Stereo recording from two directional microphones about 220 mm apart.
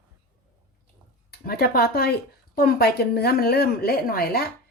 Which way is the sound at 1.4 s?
45° left (ahead or behind).